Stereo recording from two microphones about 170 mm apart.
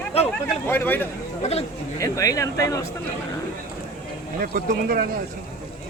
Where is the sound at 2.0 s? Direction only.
20° left (ahead or behind).